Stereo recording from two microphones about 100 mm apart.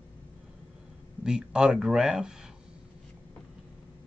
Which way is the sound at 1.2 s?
10° right (ahead or behind).